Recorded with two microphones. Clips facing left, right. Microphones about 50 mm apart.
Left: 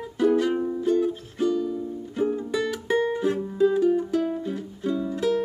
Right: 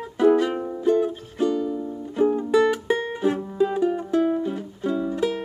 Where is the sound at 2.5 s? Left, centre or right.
Centre; by 4.2 s right.